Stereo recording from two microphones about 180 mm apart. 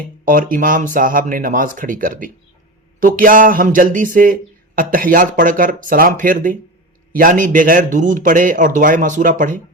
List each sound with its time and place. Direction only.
0.3 s speech: 50° right (ahead or behind)